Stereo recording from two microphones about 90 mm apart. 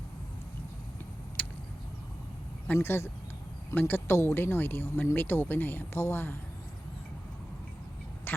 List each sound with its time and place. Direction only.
1.4 s vehicle: 15° left (ahead or behind)
2.7 s speech: 30° left (ahead or behind)
8.3 s a sound: 20° left (ahead or behind)